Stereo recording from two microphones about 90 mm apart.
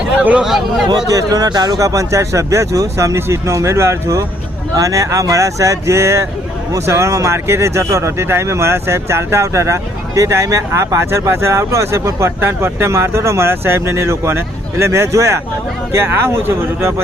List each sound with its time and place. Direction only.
0.2 s speech: 10° right (ahead or behind)
1.1 s speech: 45° right (ahead or behind); by 16.9 s 30° right (ahead or behind)